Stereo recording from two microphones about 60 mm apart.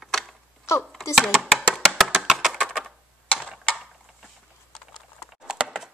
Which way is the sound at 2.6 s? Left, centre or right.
Centre.